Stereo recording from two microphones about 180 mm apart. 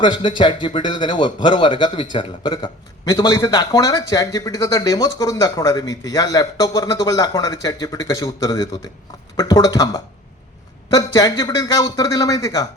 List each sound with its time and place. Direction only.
0.0 s speech: 25° left (ahead or behind)